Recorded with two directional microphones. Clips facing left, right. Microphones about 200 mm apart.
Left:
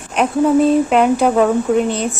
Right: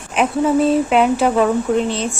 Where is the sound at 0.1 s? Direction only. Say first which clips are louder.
Left 2 dB; centre (ahead or behind).